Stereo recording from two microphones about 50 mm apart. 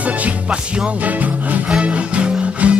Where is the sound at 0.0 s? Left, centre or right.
Right.